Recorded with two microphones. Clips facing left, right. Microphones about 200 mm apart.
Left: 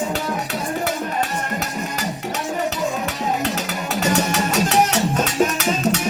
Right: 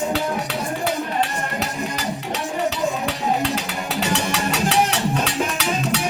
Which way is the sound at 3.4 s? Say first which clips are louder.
Even; 45° left (ahead or behind).